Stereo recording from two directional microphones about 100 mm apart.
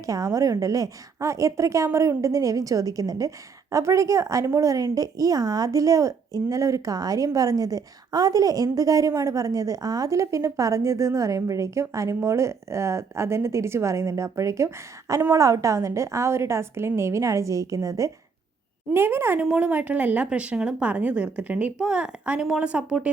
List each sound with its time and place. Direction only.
0.0 s a woman's voice: 35° right (ahead or behind)
18.9 s a woman's voice: 20° right (ahead or behind)